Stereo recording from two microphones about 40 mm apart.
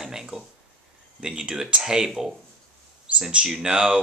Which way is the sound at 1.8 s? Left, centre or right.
Centre.